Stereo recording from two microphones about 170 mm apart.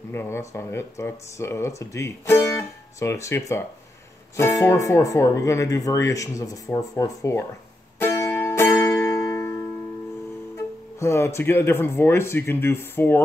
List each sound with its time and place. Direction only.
0.1 s speech: 15° left (ahead or behind)
8.0 s music: 10° left (ahead or behind)
11.0 s speech: 15° left (ahead or behind)